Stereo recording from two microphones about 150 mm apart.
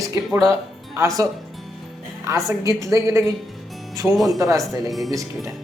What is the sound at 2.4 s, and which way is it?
Speech, 20° right (ahead or behind).